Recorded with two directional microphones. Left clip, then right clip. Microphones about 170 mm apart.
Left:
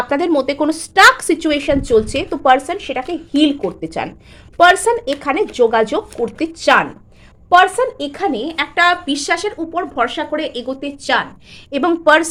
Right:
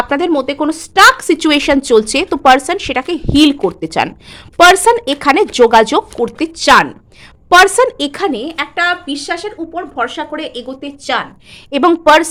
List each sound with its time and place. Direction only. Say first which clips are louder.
0.1 s a woman's voice: right 2 dB; 15° right (ahead or behind)
1.4 s a woman's voice: right 5 dB; 35° right (ahead or behind)
8.4 s a woman's voice: right 1 dB; 10° right (ahead or behind)
8.7 s speech: left 2 dB; 5° left (ahead or behind)
11.7 s a woman's voice: right 4 dB; 25° right (ahead or behind)